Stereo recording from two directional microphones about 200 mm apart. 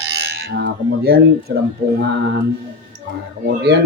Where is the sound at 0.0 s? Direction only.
55° right (ahead or behind).